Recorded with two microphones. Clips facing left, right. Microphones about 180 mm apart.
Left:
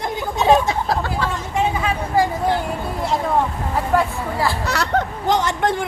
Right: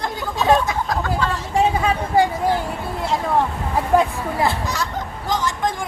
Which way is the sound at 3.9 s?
15° right (ahead or behind).